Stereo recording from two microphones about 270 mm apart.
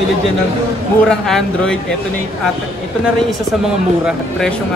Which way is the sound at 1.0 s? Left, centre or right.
Centre.